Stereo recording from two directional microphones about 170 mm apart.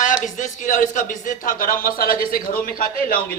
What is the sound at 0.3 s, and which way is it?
A man's voice, 50° left (ahead or behind).